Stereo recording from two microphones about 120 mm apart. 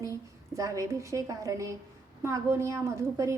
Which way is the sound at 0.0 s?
25° right (ahead or behind).